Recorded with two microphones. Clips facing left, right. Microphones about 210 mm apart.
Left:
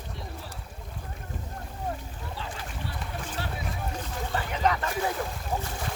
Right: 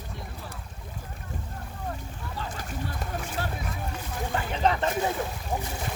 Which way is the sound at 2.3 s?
45° right (ahead or behind).